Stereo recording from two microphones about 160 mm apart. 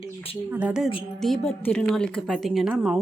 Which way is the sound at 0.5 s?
5° right (ahead or behind).